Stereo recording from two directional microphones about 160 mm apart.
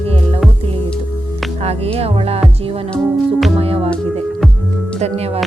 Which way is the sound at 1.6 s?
40° right (ahead or behind).